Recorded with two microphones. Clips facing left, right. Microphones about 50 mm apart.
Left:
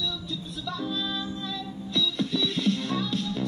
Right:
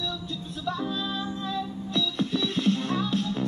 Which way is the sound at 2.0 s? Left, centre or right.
Right.